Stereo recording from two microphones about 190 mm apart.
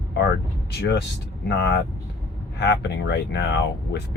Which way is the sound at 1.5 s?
65° left (ahead or behind).